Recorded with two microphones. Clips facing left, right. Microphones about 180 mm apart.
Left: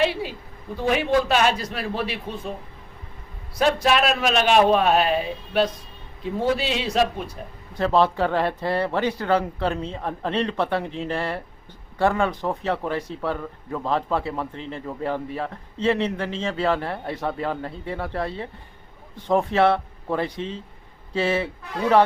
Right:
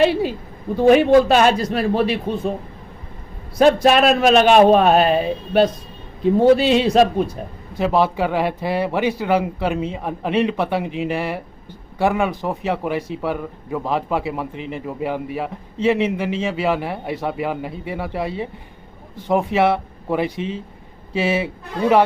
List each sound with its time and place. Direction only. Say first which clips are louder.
0.8 s a man's voice: right 9 dB; 50° right (ahead or behind)
3.6 s a man's voice: right 7 dB; 50° right (ahead or behind)
7.8 s speech: right 2 dB; 10° right (ahead or behind)